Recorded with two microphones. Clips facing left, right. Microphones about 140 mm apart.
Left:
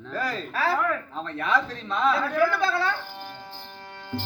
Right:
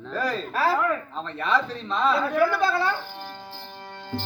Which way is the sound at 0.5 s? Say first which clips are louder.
Right 2 dB; centre (ahead or behind).